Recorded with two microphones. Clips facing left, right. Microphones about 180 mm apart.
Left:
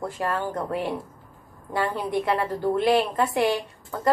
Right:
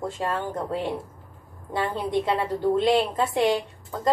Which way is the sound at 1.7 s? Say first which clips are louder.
Even; 20° right (ahead or behind).